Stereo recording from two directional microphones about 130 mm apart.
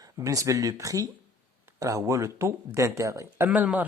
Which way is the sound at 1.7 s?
25° right (ahead or behind).